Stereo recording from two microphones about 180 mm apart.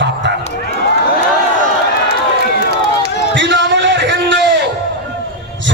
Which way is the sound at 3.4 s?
80° right.